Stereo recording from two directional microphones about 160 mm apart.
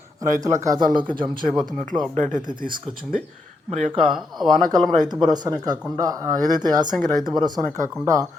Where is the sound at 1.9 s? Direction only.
15° right (ahead or behind).